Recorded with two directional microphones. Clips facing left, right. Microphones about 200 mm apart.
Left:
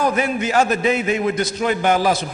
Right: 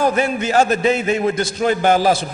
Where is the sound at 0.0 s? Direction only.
30° right (ahead or behind).